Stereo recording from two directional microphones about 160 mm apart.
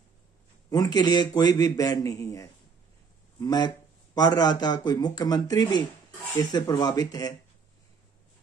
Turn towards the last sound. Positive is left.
turn(degrees=25)  # may be behind; listen again after turning